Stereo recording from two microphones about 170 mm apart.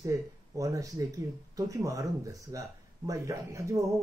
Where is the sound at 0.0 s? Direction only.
20° right (ahead or behind).